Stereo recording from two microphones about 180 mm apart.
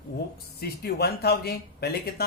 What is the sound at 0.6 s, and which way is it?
Speech, 60° left (ahead or behind).